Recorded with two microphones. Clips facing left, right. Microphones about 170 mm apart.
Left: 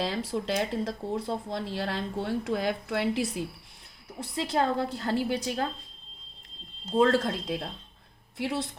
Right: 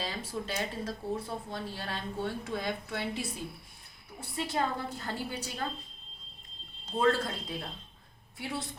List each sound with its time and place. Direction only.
0.0 s speech: 85° left
6.9 s speech: 75° left (ahead or behind)